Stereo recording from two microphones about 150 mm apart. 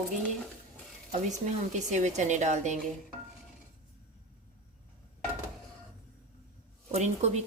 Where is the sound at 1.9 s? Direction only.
50° right (ahead or behind).